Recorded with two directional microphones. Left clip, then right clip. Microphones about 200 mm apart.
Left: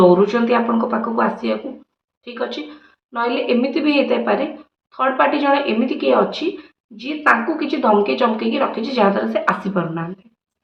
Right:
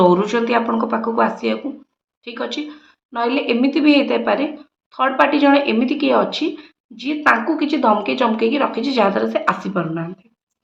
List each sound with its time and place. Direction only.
0.1 s a woman's voice: 35° right (ahead or behind)